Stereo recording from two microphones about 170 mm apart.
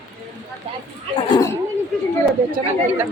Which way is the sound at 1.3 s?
20° left (ahead or behind).